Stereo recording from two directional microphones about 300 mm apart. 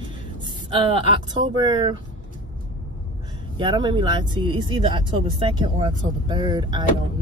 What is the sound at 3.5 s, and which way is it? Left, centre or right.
Speech, centre.